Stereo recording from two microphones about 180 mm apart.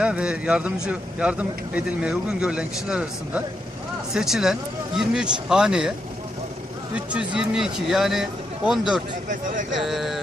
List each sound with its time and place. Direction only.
0.0 s a man's voice: 5° right (ahead or behind)
6.9 s a man's voice: 5° right (ahead or behind)
9.3 s speech: 45° right (ahead or behind)
9.7 s a man's voice: centre (ahead or behind)